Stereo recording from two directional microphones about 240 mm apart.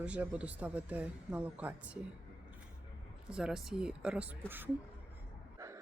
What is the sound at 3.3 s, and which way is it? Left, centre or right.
Speech, centre.